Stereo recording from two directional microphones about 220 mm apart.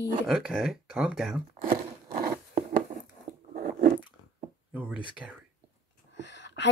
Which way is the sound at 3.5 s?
40° right (ahead or behind).